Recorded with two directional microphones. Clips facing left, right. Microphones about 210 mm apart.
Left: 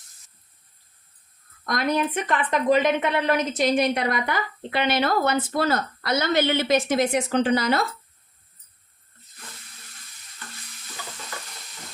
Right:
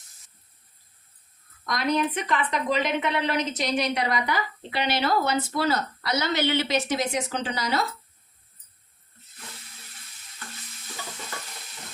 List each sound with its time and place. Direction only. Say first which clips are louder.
1.6 s a woman's voice: left 1 dB; 50° left (ahead or behind)